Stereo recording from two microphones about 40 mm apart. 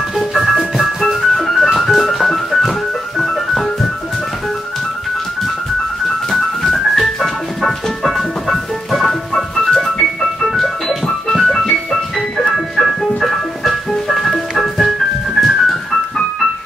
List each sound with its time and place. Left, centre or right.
0.2 s music: centre
6.3 s music: centre